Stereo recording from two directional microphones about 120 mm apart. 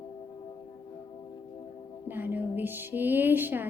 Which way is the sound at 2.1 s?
15° right (ahead or behind).